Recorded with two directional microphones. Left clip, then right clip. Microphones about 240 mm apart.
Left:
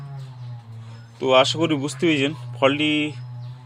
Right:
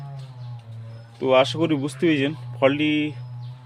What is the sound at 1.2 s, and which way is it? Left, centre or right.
Speech, centre.